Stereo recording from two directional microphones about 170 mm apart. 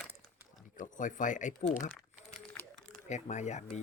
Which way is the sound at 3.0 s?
45° left (ahead or behind).